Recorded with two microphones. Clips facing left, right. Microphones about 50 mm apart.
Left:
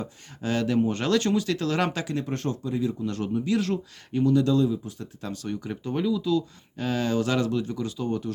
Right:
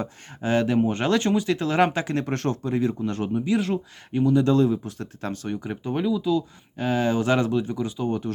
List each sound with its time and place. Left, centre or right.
0.4 s speech: right
2.1 s speech: right
3.1 s speech: right
4.4 s speech: right
5.3 s speech: right
5.5 s speech: right